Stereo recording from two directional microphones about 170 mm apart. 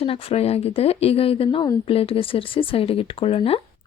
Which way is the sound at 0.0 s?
35° left (ahead or behind).